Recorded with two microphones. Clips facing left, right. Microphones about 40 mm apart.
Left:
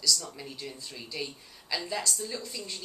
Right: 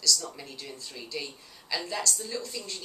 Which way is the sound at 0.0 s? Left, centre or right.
Centre.